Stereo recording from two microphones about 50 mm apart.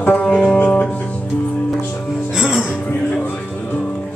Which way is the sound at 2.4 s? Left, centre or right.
Centre.